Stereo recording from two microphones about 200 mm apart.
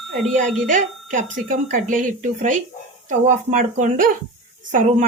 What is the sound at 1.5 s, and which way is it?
Speech, 40° right (ahead or behind).